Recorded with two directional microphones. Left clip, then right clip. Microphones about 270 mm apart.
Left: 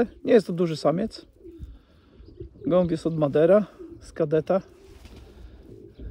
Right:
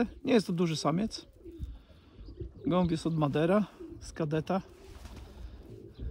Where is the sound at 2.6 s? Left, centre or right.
Centre.